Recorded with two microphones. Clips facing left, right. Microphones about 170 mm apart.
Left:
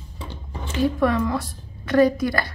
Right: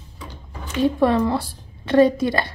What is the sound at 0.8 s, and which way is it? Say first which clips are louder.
A woman's voice: right 3 dB; 30° right (ahead or behind).